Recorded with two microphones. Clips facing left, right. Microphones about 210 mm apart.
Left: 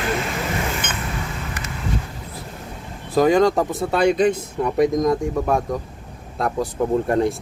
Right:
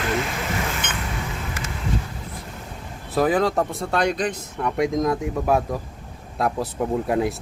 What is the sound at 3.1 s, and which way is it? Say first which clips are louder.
Speech: left 4 dB; 5° right (ahead or behind).